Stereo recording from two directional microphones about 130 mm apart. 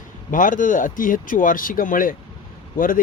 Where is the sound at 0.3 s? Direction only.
90° left.